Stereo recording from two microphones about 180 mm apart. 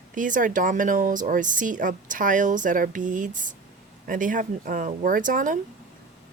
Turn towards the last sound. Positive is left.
turn(degrees=-45)  # may be behind; listen again after turning